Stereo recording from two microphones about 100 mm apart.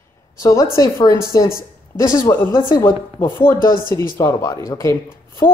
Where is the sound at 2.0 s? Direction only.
25° left (ahead or behind).